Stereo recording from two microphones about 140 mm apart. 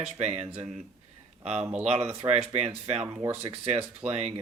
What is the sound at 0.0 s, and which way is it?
Speech, 50° right (ahead or behind).